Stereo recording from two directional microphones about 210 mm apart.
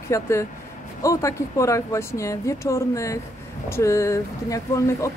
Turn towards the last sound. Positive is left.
turn(degrees=15)  # may be behind; listen again after turning